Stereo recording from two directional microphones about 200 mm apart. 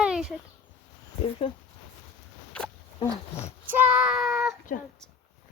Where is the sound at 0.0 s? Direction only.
5° right (ahead or behind).